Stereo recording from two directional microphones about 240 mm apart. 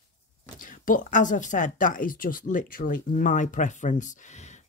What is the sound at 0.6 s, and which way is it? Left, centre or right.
A woman's voice, left.